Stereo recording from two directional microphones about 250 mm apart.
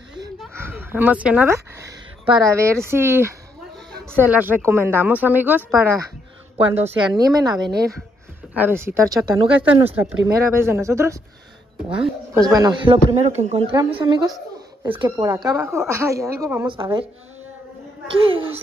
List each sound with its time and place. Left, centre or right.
0.9 s speech: centre
12.4 s speech: centre
16.7 s speech: centre
18.0 s speech: right